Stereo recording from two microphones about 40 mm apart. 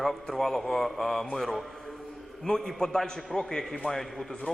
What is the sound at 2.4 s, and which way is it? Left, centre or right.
A man's voice, centre.